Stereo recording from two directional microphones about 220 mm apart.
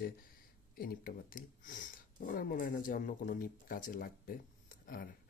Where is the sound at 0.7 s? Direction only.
40° left (ahead or behind).